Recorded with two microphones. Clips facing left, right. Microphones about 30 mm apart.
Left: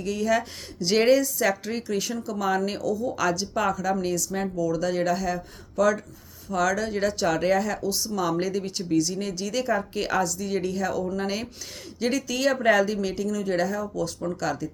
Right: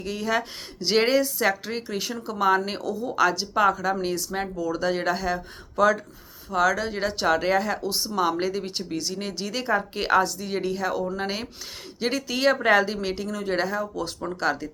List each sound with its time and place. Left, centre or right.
0.0 s speech: right